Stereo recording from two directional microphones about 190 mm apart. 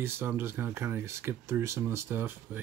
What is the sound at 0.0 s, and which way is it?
Speech, 10° right (ahead or behind).